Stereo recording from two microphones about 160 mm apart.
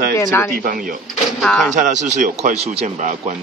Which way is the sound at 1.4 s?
Centre (ahead or behind).